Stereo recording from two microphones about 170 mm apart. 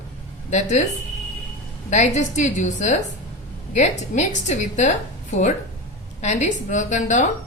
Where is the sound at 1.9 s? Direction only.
45° left (ahead or behind).